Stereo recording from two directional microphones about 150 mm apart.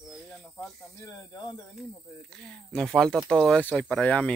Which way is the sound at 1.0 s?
20° left (ahead or behind).